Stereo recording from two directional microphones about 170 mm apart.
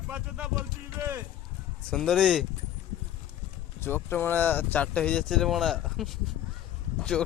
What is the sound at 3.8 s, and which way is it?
Speech, 15° left (ahead or behind).